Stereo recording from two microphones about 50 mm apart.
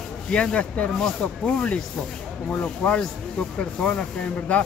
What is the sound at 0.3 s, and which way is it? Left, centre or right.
Speech, centre.